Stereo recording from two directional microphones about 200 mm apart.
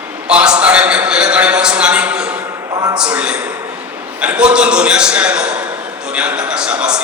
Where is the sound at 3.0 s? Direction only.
5° right (ahead or behind).